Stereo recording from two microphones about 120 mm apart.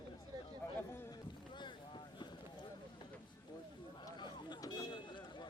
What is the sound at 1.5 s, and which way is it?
Boat, 40° left (ahead or behind).